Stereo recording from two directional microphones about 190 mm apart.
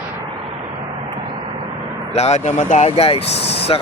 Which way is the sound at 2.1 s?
35° left (ahead or behind).